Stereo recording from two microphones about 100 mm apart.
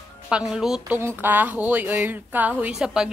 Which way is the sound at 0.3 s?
5° right (ahead or behind).